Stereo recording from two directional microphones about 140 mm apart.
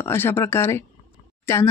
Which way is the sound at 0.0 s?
15° left (ahead or behind).